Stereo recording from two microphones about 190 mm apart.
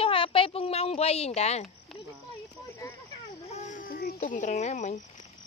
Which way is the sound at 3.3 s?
40° left (ahead or behind).